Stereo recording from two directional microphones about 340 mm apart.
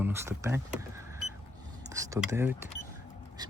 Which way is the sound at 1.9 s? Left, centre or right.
Centre.